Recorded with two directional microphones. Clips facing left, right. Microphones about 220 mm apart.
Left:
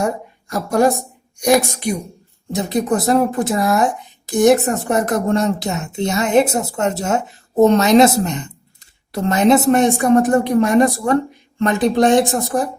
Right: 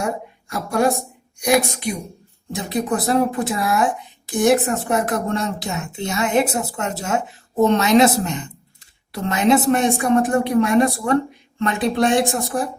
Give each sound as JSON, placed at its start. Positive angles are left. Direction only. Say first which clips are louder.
{"t": 0.4, "sound": "a woman's voice", "louder": "left 4 dB", "side_deg": 40}